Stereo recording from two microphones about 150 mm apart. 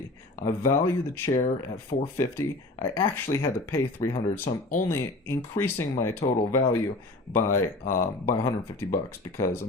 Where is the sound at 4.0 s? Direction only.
45° left (ahead or behind).